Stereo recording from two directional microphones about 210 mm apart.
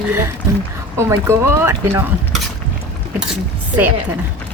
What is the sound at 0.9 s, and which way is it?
Speech, 10° right (ahead or behind).